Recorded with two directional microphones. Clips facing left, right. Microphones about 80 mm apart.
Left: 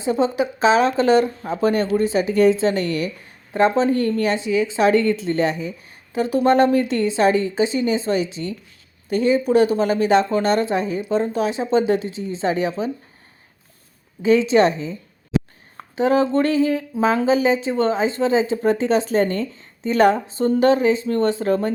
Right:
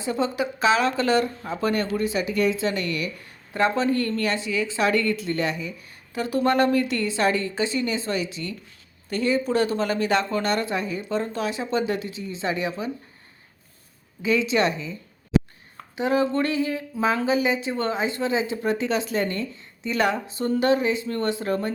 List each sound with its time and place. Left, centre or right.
0.0 s speech: left
3.5 s speech: left
14.2 s speech: left